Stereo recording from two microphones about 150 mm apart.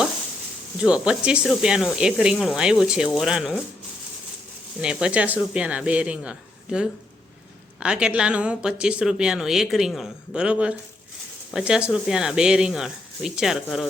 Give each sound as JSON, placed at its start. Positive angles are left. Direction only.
{"t": 0.8, "sound": "speech", "side_deg": -5}
{"t": 4.8, "sound": "speech", "side_deg": -5}